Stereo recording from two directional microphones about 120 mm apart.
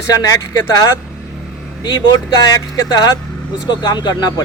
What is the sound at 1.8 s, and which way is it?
Speech, 35° left (ahead or behind).